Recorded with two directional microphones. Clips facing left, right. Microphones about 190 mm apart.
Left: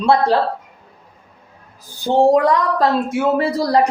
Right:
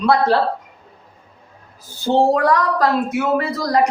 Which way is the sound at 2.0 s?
20° left (ahead or behind).